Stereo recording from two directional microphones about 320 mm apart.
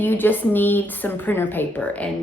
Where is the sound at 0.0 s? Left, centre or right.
Centre.